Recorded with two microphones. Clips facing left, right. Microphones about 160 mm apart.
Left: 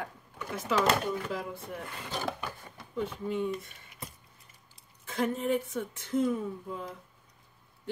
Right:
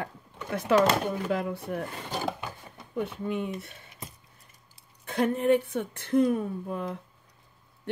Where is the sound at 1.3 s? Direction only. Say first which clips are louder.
Right 7 dB; 65° right (ahead or behind).